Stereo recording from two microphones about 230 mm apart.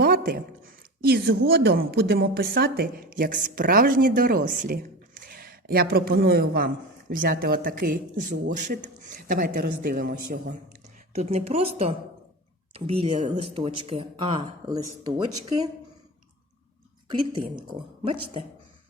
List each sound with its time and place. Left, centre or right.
0.0 s a sound: right
1.0 s a woman's voice: right
11.1 s speech: right
18.0 s speech: right